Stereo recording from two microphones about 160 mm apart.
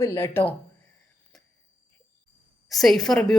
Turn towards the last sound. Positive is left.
turn(degrees=0)  # may be behind; listen again after turning